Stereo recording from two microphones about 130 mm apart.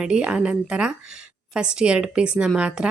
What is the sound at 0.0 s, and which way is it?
Speech, 10° right (ahead or behind).